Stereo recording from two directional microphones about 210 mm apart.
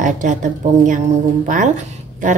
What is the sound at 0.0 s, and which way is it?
A woman's voice, 35° right (ahead or behind).